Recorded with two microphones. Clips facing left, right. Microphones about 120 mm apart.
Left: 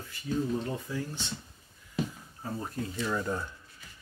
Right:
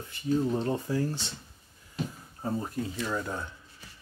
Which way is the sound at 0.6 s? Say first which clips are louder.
Right 5 dB; 35° right (ahead or behind).